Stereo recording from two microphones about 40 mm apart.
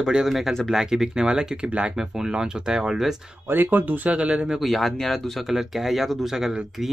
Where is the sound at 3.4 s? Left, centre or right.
Right.